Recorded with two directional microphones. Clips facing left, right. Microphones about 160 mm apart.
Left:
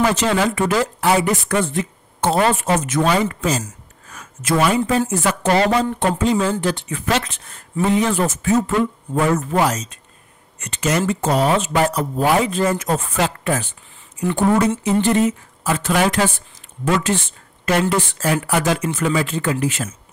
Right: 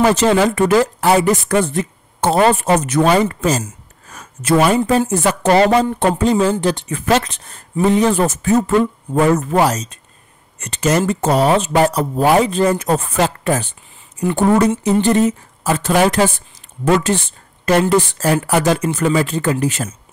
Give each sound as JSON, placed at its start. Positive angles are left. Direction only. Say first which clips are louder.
{"t": 0.0, "sound": "speech", "louder": "right 5 dB", "side_deg": -40}